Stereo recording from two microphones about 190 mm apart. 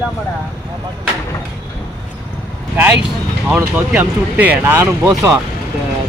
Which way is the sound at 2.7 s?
10° right (ahead or behind).